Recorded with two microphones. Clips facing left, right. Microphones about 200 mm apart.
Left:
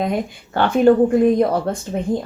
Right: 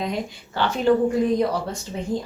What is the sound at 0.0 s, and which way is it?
Speech, 55° left (ahead or behind).